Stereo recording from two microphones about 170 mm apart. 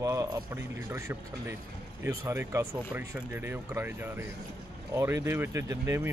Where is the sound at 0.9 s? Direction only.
15° right (ahead or behind).